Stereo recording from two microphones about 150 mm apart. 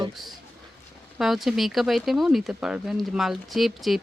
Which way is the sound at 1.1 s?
Centre (ahead or behind).